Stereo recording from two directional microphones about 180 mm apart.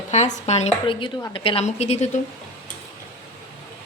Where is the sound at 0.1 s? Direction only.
40° left (ahead or behind).